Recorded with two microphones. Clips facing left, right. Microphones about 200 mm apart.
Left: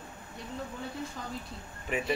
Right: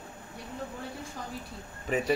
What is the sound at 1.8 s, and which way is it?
Speech, 35° right (ahead or behind).